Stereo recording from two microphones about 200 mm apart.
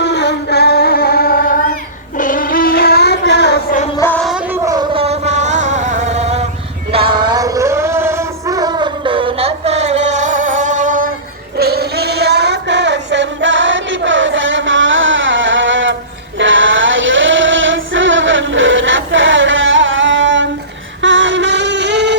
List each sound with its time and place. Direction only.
0.0 s music: 55° left (ahead or behind)
2.1 s child singing: 45° left (ahead or behind)
3.9 s music: 10° left (ahead or behind)
4.5 s vehicle: 15° right (ahead or behind); by 6.4 s 35° right (ahead or behind)
6.9 s music: 25° right (ahead or behind); by 11.1 s 40° right (ahead or behind)
11.5 s music: 55° right (ahead or behind); by 16.0 s 70° right (ahead or behind)
16.4 s a sound: 70° right (ahead or behind)